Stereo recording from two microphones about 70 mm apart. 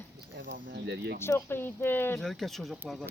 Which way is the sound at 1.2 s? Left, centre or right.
Left.